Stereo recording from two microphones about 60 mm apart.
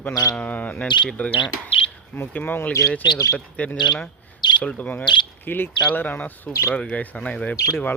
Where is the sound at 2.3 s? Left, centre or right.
Left.